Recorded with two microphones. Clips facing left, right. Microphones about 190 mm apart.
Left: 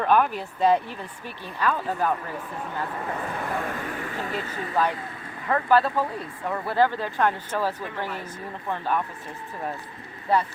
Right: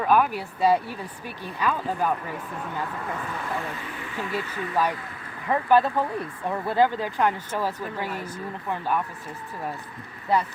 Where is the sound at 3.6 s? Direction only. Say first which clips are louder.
Left 4 dB; 50° left (ahead or behind).